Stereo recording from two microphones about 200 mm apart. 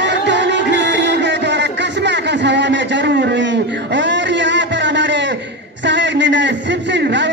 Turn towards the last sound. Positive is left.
turn(degrees=-60)  # may be behind; listen again after turning